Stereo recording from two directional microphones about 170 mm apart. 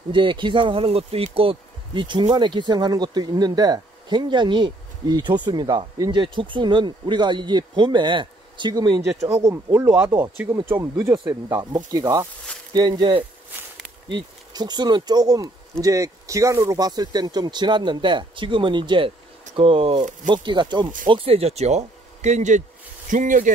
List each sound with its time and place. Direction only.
0.1 s speech: 30° right (ahead or behind); by 23.5 s 50° right (ahead or behind)